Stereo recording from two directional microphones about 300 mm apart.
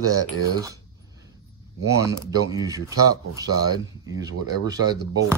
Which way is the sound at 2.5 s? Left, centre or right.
Centre.